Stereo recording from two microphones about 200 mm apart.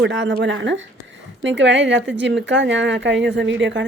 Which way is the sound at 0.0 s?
65° right (ahead or behind).